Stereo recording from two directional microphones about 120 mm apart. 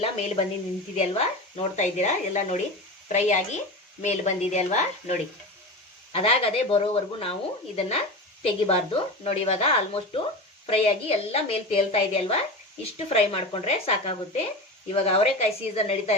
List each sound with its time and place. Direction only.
0.0 s a woman's voice: 65° left (ahead or behind)
3.1 s speech: 90° left
4.0 s speech: 75° left (ahead or behind)
6.1 s a woman's voice: 55° left (ahead or behind)